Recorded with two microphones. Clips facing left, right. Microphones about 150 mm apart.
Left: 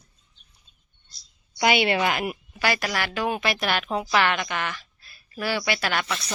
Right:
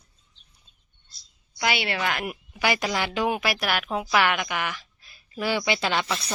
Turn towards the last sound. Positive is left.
turn(degrees=-20)  # may be behind; listen again after turning